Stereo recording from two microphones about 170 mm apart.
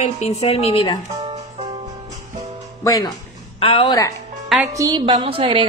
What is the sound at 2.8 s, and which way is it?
Speech, 20° left (ahead or behind).